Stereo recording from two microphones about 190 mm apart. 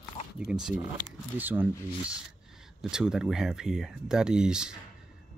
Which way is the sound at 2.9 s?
5° right (ahead or behind).